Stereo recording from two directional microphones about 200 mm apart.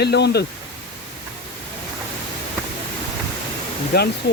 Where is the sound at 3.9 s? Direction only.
55° left (ahead or behind).